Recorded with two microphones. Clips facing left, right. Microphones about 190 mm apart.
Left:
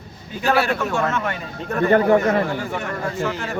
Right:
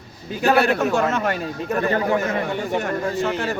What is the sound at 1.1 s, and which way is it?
Speech, 40° right (ahead or behind).